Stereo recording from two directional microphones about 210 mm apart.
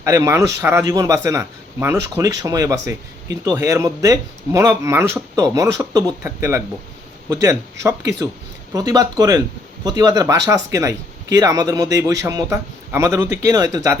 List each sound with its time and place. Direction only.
0.0 s speech: 15° right (ahead or behind)